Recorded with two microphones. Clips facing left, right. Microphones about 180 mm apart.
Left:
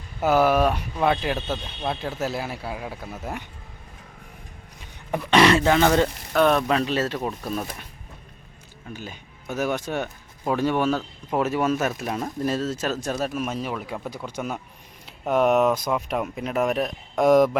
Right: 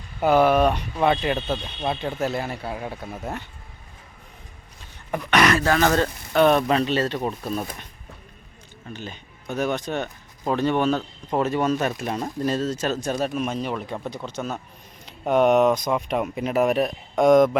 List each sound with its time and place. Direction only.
0.2 s speech: 5° left (ahead or behind)
5.3 s speech: 25° left (ahead or behind)
6.3 s speech: 5° right (ahead or behind)
8.9 s speech: 5° left (ahead or behind)